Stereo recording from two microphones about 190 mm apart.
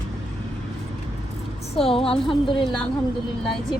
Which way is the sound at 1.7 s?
30° left (ahead or behind).